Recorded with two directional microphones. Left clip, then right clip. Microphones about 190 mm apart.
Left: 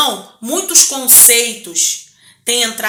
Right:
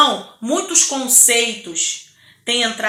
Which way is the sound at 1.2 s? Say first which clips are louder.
Left 3 dB; 15° left (ahead or behind).